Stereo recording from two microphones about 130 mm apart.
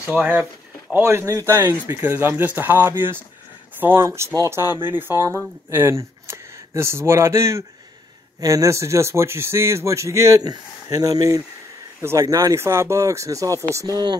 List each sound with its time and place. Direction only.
0.1 s speech: 10° right (ahead or behind); by 14.1 s 30° right (ahead or behind)